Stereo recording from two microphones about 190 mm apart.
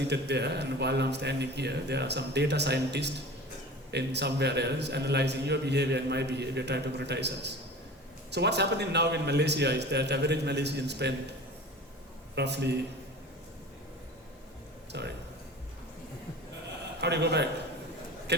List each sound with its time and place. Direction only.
0.1 s a man's voice: 65° right (ahead or behind)
12.3 s a man's voice: 65° right (ahead or behind)
14.9 s a man's voice: 65° right (ahead or behind)
17.0 s a man's voice: 60° right (ahead or behind)